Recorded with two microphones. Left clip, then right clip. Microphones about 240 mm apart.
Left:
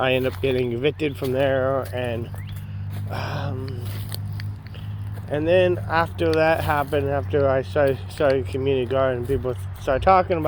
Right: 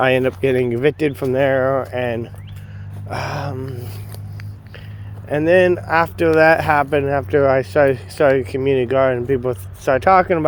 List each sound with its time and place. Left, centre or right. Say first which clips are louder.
0.0 s speech: right 6 dB; right
5.3 s speech: right 5 dB; right